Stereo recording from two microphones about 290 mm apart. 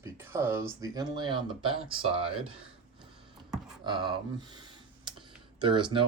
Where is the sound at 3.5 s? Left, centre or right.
Centre.